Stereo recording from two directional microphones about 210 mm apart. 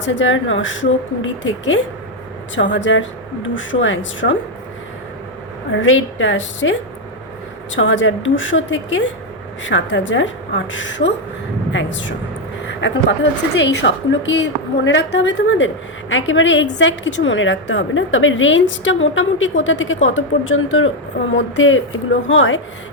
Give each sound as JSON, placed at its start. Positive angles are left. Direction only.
{"t": 0.0, "sound": "a woman's voice", "side_deg": 65}
{"t": 5.7, "sound": "a woman's voice", "side_deg": 65}
{"t": 12.6, "sound": "a sound", "side_deg": 55}
{"t": 13.6, "sound": "a woman's voice", "side_deg": 55}